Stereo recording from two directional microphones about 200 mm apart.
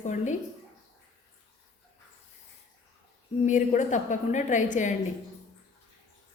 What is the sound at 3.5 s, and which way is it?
A woman's voice, 40° left (ahead or behind).